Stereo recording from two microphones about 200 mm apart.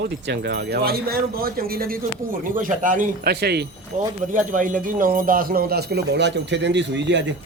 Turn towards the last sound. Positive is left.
turn(degrees=-60)  # may be behind; listen again after turning